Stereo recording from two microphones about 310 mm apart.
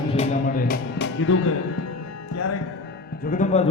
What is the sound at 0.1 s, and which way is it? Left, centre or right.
Music, left.